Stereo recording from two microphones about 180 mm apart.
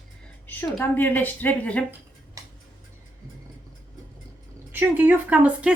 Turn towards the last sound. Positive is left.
turn(degrees=-5)  # may be behind; listen again after turning